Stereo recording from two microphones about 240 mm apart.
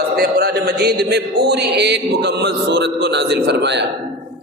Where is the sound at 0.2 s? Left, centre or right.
Right.